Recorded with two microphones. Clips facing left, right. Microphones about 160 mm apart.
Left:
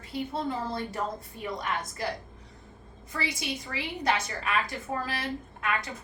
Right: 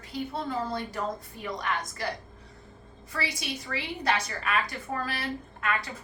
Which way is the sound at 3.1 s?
20° left (ahead or behind).